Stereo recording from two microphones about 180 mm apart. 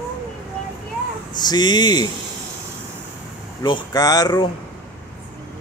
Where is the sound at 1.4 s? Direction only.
25° left (ahead or behind).